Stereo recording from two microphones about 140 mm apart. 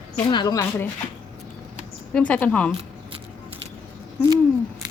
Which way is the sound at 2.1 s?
10° left (ahead or behind).